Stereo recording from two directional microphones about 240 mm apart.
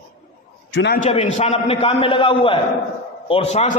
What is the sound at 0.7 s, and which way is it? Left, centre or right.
Speech, left.